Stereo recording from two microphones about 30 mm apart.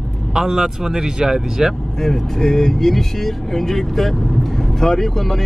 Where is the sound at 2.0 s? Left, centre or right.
Centre.